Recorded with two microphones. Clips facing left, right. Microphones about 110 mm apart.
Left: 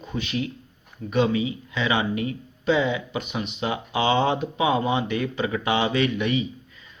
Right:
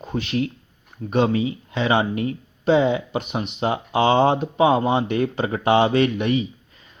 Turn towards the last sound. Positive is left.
turn(degrees=-45)  # may be behind; listen again after turning